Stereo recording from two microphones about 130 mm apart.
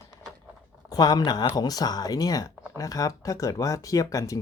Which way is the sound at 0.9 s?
30° left (ahead or behind).